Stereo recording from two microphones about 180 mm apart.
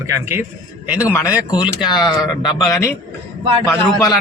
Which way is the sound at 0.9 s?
15° left (ahead or behind).